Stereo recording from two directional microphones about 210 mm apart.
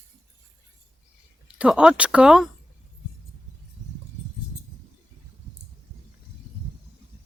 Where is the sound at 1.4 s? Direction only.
5° right (ahead or behind).